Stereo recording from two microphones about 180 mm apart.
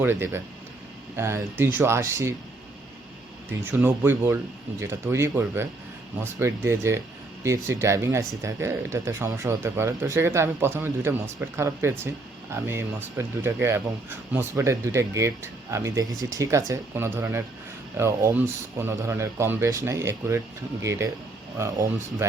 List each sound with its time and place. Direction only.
0.2 s speech: 15° right (ahead or behind)
3.6 s speech: 10° right (ahead or behind)